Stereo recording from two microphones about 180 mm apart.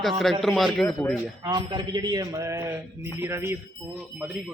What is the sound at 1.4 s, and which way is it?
Speech, 25° right (ahead or behind).